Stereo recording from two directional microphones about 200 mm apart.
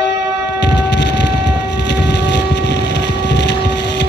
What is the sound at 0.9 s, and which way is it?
Vehicle, 60° left (ahead or behind).